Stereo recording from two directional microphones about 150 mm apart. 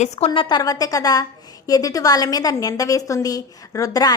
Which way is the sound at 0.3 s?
30° left (ahead or behind).